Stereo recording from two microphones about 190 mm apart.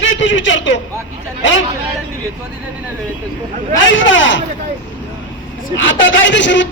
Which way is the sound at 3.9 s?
85° left.